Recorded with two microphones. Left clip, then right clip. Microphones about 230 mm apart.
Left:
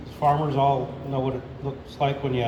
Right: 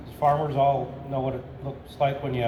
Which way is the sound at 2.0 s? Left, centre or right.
Right.